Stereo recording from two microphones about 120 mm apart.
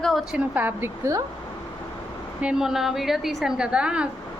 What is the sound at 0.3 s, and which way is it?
Speech, 15° right (ahead or behind).